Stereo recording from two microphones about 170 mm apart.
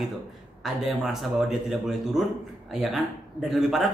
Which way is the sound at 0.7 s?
Centre (ahead or behind).